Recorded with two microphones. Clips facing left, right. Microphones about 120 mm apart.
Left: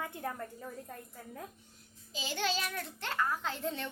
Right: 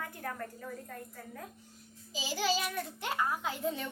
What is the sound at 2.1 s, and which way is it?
A child's voice, 5° right (ahead or behind).